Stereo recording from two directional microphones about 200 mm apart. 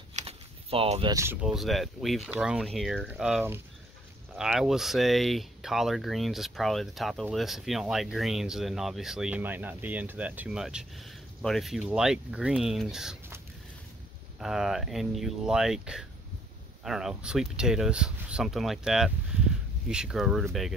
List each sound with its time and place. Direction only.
0.1 s a sound: 30° right (ahead or behind)
1.1 s speech: 10° right (ahead or behind)
14.4 s speech: centre (ahead or behind)